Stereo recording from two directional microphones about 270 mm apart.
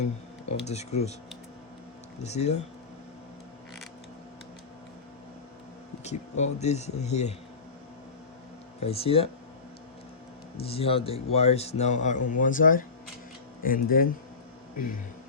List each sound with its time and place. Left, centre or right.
0.6 s a man's voice: left
2.2 s a man's voice: left
6.1 s a man's voice: left
8.8 s a man's voice: left
10.6 s a man's voice: left